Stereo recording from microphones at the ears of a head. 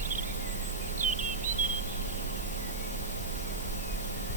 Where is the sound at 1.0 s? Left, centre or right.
Right.